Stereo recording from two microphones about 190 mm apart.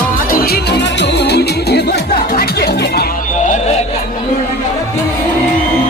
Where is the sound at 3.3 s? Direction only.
40° left (ahead or behind).